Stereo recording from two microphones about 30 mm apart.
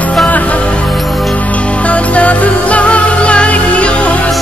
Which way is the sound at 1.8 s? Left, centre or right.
Left.